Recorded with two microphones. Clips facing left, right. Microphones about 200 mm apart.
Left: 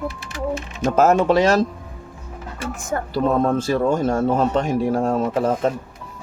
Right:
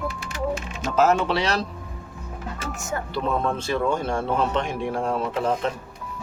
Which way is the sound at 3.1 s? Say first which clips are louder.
Left 7 dB; 45° left (ahead or behind).